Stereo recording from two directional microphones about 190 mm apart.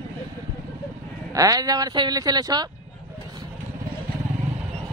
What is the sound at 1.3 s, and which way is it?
Speech, 20° right (ahead or behind).